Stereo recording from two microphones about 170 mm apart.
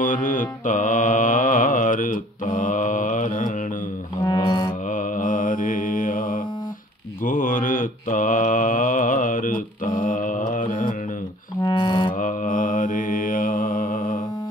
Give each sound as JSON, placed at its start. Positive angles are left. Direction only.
{"t": 0.0, "sound": "mantra", "side_deg": 50}
{"t": 4.2, "sound": "music", "side_deg": 25}
{"t": 4.9, "sound": "mantra", "side_deg": 50}
{"t": 11.6, "sound": "music", "side_deg": 25}
{"t": 12.2, "sound": "mantra", "side_deg": 50}